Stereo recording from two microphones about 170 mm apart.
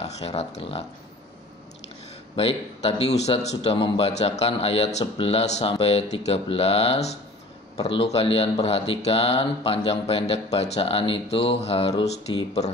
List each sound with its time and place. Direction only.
0.0 s speech: 35° left (ahead or behind)
2.3 s speech: 35° left (ahead or behind)